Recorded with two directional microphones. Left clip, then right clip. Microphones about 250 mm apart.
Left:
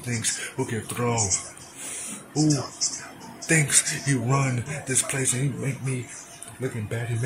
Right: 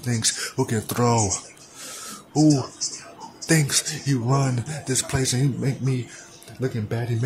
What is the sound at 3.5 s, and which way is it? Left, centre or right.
Speech, centre.